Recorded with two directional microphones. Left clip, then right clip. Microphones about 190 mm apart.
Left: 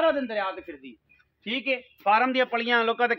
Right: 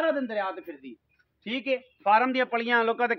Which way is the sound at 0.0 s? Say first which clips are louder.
Left 3 dB; 55° right (ahead or behind).